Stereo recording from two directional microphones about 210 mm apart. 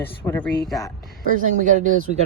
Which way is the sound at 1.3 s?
40° right (ahead or behind).